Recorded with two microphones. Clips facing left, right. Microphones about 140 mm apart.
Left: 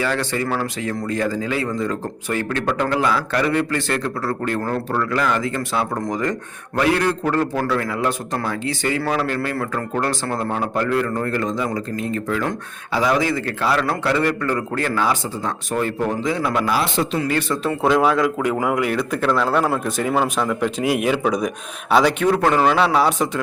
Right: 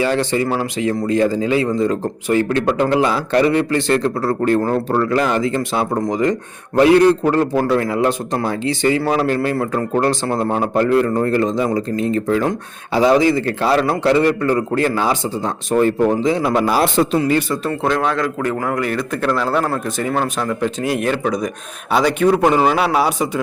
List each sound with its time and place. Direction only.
0.0 s a man's voice: 20° right (ahead or behind)
6.1 s a man's voice: 15° right (ahead or behind)
16.6 s a man's voice: 40° right (ahead or behind)
17.2 s a man's voice: 25° right (ahead or behind)
17.7 s speech: 5° left (ahead or behind)
22.4 s speech: 15° right (ahead or behind)